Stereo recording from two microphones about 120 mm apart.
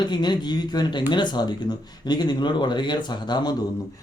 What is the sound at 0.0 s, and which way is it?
Speech, 40° left (ahead or behind).